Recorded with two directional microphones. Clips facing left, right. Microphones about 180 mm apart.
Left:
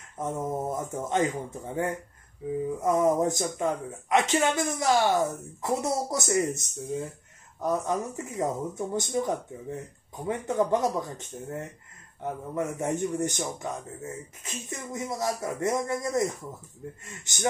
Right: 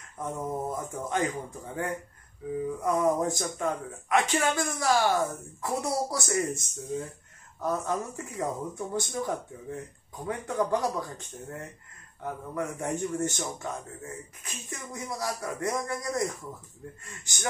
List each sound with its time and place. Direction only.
0.2 s speech: 20° left (ahead or behind)